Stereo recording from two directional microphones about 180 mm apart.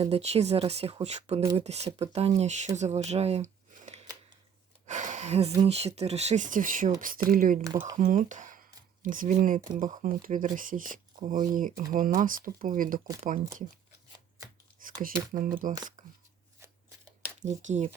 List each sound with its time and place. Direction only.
0.0 s speech: 35° right (ahead or behind); by 7.6 s 50° right (ahead or behind)
7.6 s speech: 20° right (ahead or behind)
7.9 s speech: 45° right (ahead or behind)
14.8 s speech: 50° right (ahead or behind)
16.0 s a sound: 45° right (ahead or behind)
17.4 s speech: 40° right (ahead or behind)